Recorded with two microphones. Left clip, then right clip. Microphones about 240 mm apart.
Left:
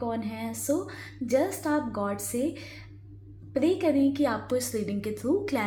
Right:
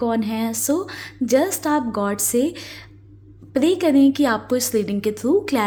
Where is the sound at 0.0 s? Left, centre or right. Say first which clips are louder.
Right 10 dB; right.